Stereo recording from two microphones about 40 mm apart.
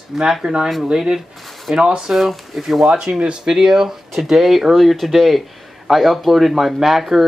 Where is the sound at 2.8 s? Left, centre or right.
Centre.